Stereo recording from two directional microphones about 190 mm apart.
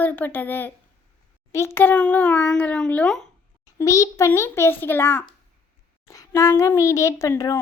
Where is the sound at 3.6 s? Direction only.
15° left (ahead or behind).